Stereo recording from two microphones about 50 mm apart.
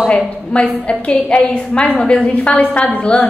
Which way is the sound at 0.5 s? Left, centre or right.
Left.